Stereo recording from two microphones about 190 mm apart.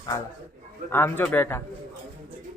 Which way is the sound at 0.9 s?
10° left (ahead or behind).